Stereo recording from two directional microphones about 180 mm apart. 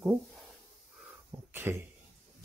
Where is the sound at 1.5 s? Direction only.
10° right (ahead or behind).